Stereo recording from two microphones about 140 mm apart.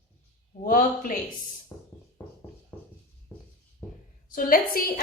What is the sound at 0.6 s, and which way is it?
Speech, 85° left.